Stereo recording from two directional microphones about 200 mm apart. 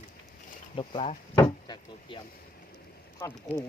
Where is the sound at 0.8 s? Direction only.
30° left (ahead or behind).